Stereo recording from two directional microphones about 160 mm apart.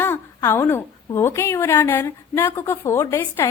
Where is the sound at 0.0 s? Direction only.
15° left (ahead or behind).